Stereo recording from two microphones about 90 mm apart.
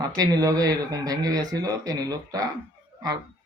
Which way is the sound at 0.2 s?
45° right (ahead or behind).